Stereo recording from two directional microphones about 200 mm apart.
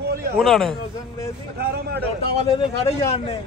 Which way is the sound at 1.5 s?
55° right (ahead or behind).